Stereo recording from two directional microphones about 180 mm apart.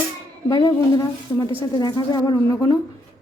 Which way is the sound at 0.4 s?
20° left (ahead or behind).